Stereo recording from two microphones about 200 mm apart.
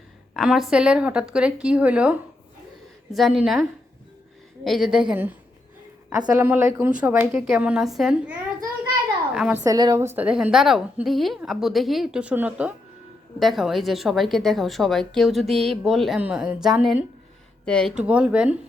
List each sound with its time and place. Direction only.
0.3 s a woman's voice: centre (ahead or behind)
9.6 s a woman's voice: 20° right (ahead or behind)
10.2 s speech: 5° right (ahead or behind)
18.0 s a woman's voice: 5° right (ahead or behind)